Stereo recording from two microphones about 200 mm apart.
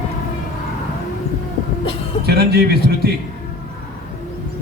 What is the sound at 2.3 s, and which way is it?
Speech, 50° right (ahead or behind).